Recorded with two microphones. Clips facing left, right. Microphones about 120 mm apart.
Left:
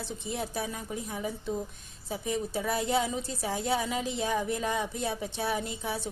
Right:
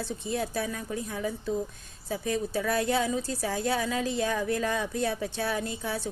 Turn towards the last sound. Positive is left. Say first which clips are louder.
# right 2 dB
turn(degrees=20)  # may be behind; listen again after turning